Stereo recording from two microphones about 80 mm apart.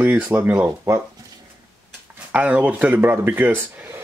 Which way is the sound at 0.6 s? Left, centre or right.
Right.